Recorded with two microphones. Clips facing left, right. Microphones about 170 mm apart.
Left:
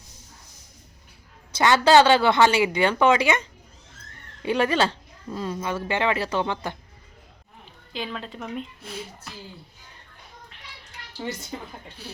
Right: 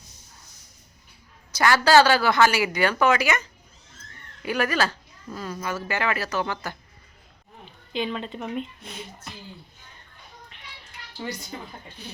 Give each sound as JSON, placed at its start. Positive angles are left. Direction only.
{"t": 1.5, "sound": "speech", "side_deg": 20}
{"t": 7.9, "sound": "speech", "side_deg": 0}
{"t": 12.1, "sound": "speech", "side_deg": 5}